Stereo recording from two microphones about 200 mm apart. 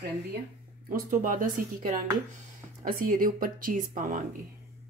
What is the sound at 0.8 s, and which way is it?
Speech, 45° right (ahead or behind).